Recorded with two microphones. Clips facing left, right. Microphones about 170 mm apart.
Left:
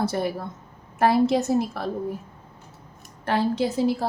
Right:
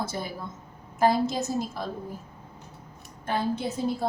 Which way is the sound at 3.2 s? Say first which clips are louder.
Left 5 dB; 75° left (ahead or behind).